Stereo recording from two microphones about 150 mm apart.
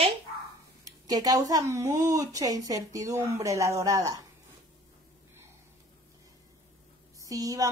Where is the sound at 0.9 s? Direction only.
25° right (ahead or behind).